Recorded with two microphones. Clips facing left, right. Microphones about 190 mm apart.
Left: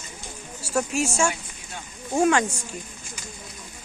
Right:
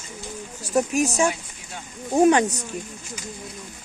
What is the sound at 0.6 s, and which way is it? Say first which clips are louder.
Speech: right 4 dB; 15° right (ahead or behind).